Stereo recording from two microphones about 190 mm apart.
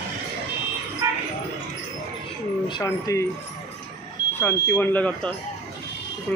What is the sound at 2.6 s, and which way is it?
Speech, 20° left (ahead or behind).